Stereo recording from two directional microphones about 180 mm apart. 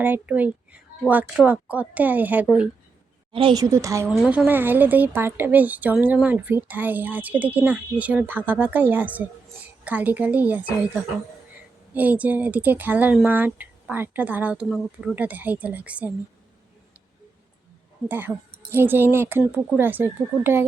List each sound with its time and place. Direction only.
0.0 s speech: 10° right (ahead or behind)
3.3 s speech: 25° right (ahead or behind)
4.2 s speech: 5° right (ahead or behind)
18.1 s speech: 10° right (ahead or behind)